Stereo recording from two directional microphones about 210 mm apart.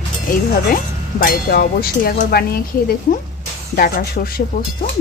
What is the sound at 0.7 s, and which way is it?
Speech, 40° left (ahead or behind).